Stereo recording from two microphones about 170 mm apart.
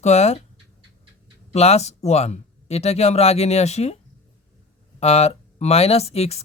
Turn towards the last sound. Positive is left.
turn(degrees=35)  # may be behind; listen again after turning